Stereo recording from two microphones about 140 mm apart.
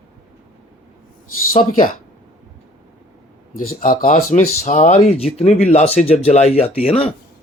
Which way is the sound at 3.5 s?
75° left (ahead or behind).